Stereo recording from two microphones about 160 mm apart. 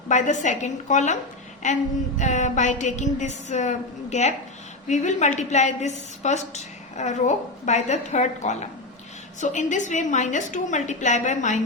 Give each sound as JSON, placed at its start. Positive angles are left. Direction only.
{"t": 0.1, "sound": "a woman's voice", "side_deg": 50}